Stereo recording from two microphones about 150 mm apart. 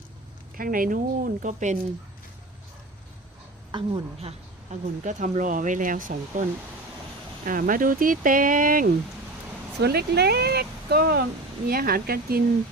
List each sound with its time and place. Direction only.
0.5 s a woman's voice: 65° right (ahead or behind)
3.7 s a woman's voice: 35° right (ahead or behind); by 6.4 s 65° right (ahead or behind)
7.4 s speech: 65° right (ahead or behind)
9.8 s speech: 90° right